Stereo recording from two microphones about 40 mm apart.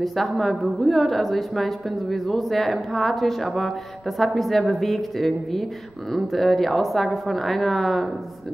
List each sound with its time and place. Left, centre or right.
0.0 s a woman's voice: centre